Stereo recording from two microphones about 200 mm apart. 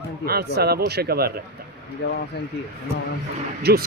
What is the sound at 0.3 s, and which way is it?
A man's voice, 50° right (ahead or behind).